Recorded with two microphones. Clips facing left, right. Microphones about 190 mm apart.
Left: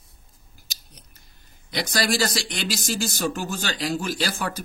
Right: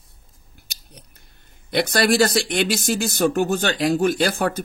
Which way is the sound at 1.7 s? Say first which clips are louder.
Right 6 dB; 60° right (ahead or behind).